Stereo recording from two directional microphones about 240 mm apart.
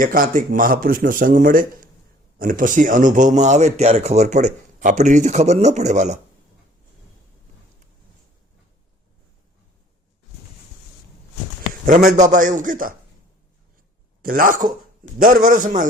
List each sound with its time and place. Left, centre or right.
0.0 s speech: right
11.9 s speech: right
14.2 s a man's voice: right